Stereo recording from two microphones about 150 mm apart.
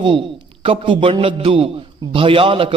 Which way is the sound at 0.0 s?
35° right (ahead or behind).